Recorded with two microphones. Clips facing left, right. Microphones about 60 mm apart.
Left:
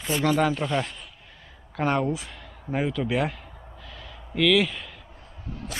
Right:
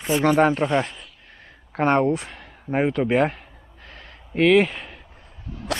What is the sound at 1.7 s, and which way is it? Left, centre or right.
A man's voice, right.